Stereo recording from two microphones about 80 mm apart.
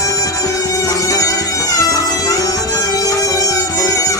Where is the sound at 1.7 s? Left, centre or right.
Left.